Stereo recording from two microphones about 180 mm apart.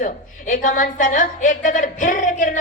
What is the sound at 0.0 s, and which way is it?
A woman's voice, 45° left (ahead or behind).